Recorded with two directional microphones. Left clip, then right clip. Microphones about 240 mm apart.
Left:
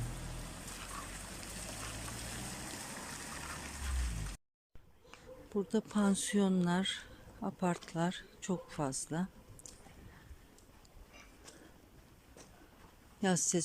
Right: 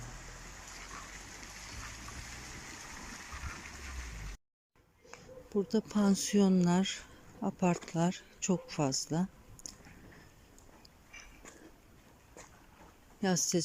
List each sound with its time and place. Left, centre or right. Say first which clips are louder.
1.8 s a sound: left 1 dB; left
5.5 s speech: right 3 dB; centre
13.2 s speech: right 1 dB; centre